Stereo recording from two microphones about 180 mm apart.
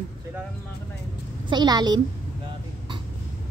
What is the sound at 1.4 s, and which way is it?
Speech, 25° right (ahead or behind).